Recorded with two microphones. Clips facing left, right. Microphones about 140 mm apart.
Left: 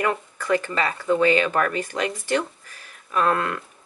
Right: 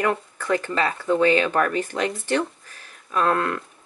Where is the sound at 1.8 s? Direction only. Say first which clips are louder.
Right 2 dB; 10° left (ahead or behind).